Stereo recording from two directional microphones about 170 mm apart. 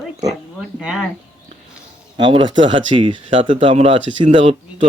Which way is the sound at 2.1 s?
30° right (ahead or behind).